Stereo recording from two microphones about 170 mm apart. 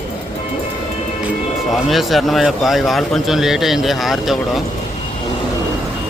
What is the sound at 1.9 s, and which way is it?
Speech, centre (ahead or behind).